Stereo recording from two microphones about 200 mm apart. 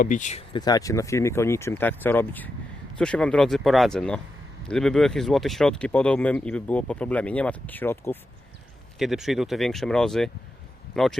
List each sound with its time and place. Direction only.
0.0 s speech: 40° left (ahead or behind)
0.6 s speech: 20° left (ahead or behind)
9.0 s speech: centre (ahead or behind)